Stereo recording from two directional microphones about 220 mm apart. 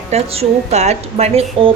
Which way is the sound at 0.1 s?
30° right (ahead or behind).